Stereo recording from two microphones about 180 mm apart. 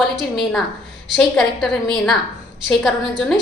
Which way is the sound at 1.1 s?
5° left (ahead or behind).